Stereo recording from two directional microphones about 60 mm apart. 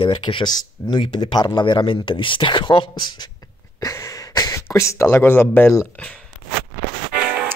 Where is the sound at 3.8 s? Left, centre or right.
Left.